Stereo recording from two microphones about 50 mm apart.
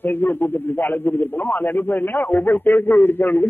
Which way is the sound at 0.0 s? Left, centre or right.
Left.